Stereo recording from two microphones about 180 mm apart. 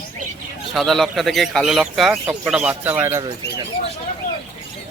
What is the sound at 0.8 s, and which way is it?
Speech, centre (ahead or behind).